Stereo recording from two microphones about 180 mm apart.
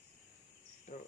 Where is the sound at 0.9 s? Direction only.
50° left (ahead or behind).